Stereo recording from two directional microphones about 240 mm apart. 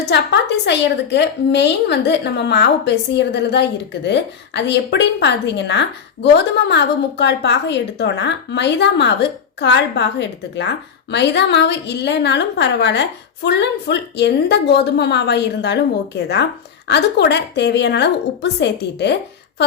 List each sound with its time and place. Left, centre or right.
0.1 s a woman's voice: left